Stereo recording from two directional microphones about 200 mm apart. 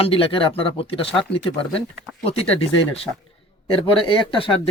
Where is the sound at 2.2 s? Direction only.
30° left (ahead or behind).